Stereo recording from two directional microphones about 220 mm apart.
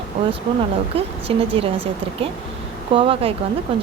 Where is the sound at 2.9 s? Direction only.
25° right (ahead or behind).